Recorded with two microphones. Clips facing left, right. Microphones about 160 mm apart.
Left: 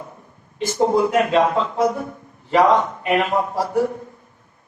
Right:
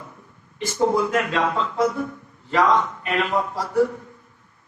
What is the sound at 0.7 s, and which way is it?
A man's voice, 20° left (ahead or behind).